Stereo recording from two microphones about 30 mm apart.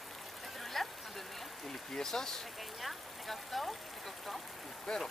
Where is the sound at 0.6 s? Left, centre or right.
Centre.